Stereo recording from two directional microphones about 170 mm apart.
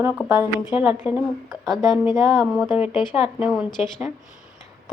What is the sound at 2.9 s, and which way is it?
Speech, 25° left (ahead or behind).